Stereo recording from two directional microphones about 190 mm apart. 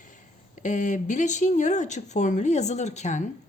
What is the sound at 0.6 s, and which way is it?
Speech, 40° left (ahead or behind).